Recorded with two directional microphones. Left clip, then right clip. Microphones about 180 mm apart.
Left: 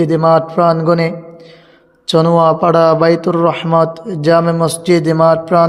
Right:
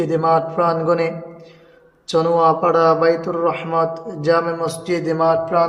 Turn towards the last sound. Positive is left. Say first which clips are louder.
# left 6 dB
turn(degrees=50)  # may be behind; listen again after turning